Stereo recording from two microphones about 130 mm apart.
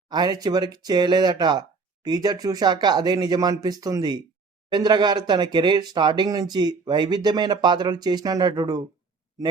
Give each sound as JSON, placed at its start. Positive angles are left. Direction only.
{"t": 0.1, "sound": "speech", "side_deg": -30}